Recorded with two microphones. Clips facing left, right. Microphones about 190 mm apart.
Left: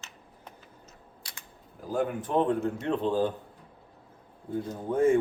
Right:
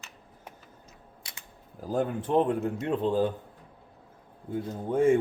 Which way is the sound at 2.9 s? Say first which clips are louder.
Even; 5° right (ahead or behind).